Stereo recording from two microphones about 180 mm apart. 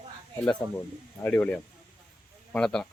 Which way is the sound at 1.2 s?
10° left (ahead or behind).